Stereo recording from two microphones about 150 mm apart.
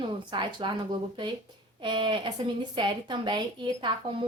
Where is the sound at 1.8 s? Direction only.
30° right (ahead or behind).